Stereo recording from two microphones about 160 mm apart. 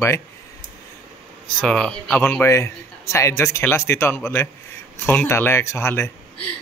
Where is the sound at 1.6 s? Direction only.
5° left (ahead or behind).